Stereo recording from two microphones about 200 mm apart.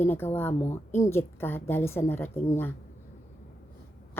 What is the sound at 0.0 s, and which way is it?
Speech, 10° left (ahead or behind).